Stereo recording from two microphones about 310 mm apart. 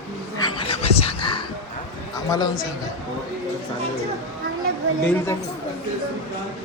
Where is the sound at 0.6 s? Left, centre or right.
Centre.